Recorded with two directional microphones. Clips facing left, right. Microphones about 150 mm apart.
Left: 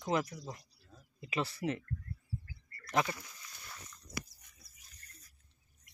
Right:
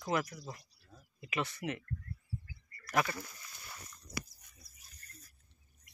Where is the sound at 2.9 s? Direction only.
20° left (ahead or behind).